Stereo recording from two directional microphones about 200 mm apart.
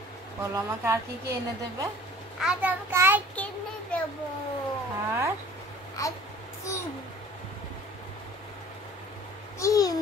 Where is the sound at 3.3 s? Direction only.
5° left (ahead or behind).